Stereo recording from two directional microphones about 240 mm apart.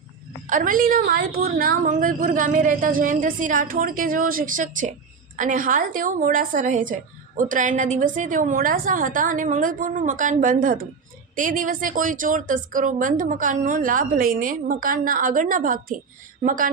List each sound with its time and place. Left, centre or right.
0.5 s a woman's voice: right